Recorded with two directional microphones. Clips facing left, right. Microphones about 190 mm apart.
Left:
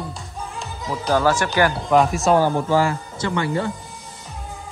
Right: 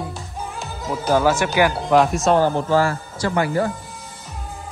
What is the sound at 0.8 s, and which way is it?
Speech, 5° right (ahead or behind).